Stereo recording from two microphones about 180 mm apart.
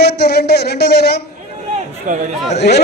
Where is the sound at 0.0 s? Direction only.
65° left (ahead or behind).